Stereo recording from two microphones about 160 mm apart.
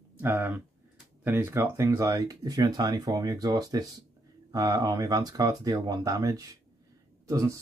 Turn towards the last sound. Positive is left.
turn(degrees=-20)  # may be behind; listen again after turning